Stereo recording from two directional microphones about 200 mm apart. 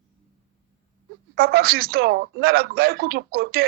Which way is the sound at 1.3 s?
50° right (ahead or behind).